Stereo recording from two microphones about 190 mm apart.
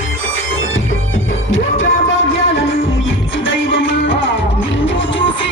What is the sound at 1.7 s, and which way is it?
Music, 90° left.